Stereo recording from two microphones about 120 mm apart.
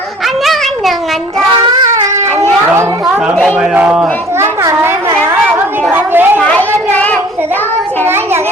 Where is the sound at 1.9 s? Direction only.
25° right (ahead or behind).